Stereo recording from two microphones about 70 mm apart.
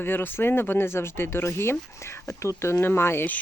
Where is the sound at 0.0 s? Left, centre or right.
Left.